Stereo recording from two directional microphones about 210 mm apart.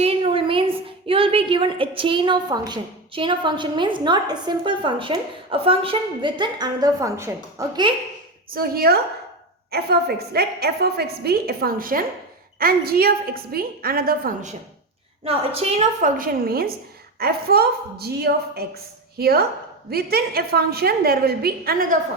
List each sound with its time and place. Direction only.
0.0 s a sound: 25° right (ahead or behind)
1.0 s a woman's voice: 25° right (ahead or behind)
8.4 s a woman's voice: 45° right (ahead or behind)
15.2 s a woman's voice: 30° right (ahead or behind); by 21.9 s 45° right (ahead or behind)